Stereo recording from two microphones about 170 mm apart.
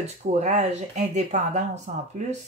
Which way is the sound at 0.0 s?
40° right (ahead or behind).